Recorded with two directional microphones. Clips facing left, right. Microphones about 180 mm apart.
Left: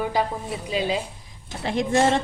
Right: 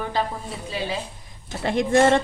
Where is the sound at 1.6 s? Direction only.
55° right (ahead or behind).